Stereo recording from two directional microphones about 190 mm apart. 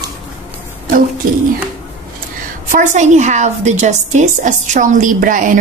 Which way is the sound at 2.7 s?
40° right (ahead or behind).